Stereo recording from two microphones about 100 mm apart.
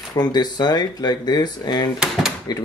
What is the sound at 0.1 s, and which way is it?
Speech, 45° left (ahead or behind).